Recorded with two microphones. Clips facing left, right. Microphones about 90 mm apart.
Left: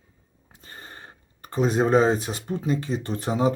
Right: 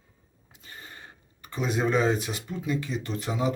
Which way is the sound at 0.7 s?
40° left (ahead or behind).